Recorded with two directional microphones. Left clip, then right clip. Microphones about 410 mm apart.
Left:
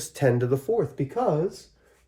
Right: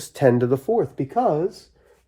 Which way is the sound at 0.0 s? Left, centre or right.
Right.